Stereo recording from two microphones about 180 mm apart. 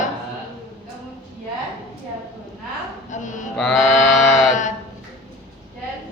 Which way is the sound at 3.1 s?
45° left (ahead or behind).